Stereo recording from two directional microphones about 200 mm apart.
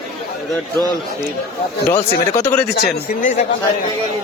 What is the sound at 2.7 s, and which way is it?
Speech, 40° left (ahead or behind).